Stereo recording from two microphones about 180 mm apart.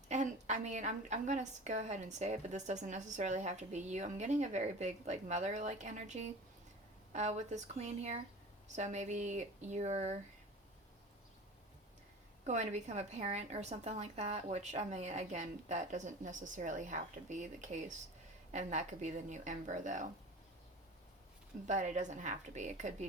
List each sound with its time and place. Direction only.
0.1 s a woman's voice: 40° right (ahead or behind)
12.5 s a woman's voice: 40° right (ahead or behind)
21.7 s a woman's voice: 40° right (ahead or behind)